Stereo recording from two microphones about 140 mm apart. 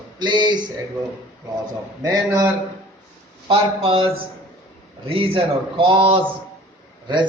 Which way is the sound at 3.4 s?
40° right (ahead or behind).